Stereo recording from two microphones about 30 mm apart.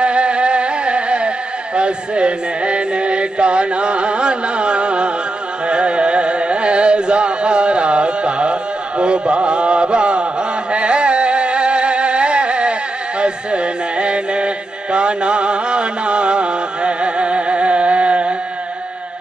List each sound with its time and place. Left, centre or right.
0.0 s carnatic music: right
1.8 s music: right
5.7 s carnatic music: right
10.7 s a sound: right
13.2 s chant: right